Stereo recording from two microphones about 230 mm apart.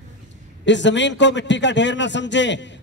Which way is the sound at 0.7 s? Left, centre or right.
Left.